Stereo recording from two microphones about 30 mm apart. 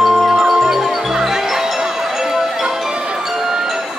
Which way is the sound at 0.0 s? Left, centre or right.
Centre.